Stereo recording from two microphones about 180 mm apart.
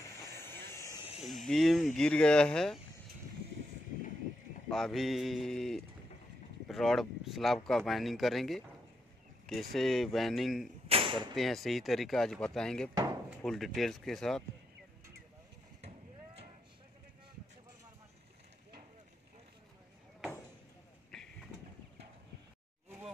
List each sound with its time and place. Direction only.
0.4 s vehicle: 15° left (ahead or behind)
1.2 s speech: centre (ahead or behind)
4.6 s speech: centre (ahead or behind)
10.9 s arrow: 30° right (ahead or behind)
11.3 s speech: centre (ahead or behind)
21.1 s vehicle: centre (ahead or behind)